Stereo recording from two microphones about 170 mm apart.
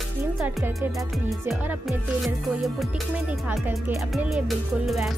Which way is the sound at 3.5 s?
10° right (ahead or behind).